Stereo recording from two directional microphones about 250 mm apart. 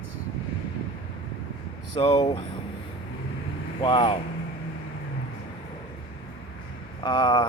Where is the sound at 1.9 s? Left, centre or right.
Left.